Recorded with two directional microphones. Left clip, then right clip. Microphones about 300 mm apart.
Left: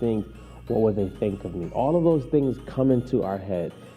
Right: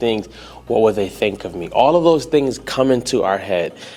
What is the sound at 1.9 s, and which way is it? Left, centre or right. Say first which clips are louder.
Speech: right 6 dB; right.